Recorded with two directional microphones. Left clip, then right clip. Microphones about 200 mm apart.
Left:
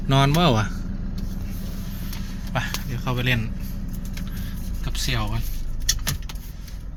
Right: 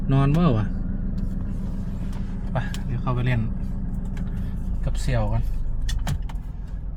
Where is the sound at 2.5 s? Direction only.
5° left (ahead or behind).